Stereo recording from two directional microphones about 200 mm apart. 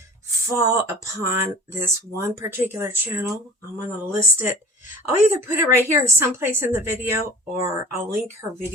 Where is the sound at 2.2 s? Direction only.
10° right (ahead or behind).